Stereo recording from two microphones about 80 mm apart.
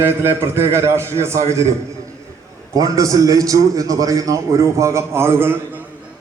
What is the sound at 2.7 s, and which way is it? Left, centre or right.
A man's voice, right.